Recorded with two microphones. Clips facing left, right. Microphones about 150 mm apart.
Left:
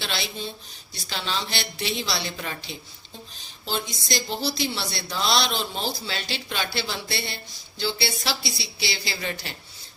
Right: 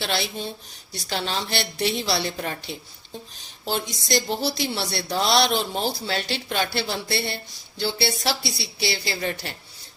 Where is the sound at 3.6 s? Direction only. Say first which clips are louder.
Right 3 dB; 60° right (ahead or behind).